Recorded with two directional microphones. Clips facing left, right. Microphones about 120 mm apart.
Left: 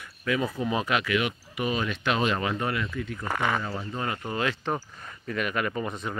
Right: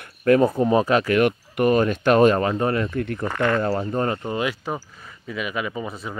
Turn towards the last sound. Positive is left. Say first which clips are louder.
# right 1 dB
turn(degrees=-5)  # may be behind; listen again after turning